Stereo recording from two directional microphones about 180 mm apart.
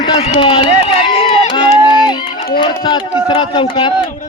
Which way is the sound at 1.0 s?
25° left (ahead or behind).